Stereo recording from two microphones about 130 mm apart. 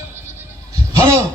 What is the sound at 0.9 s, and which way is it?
Speech, 20° right (ahead or behind).